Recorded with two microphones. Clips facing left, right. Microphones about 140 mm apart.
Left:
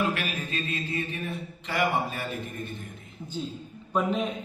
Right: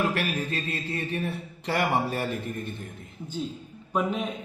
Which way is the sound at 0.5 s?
70° right (ahead or behind).